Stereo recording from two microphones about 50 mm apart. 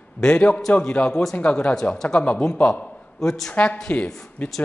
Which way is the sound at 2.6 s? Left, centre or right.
Left.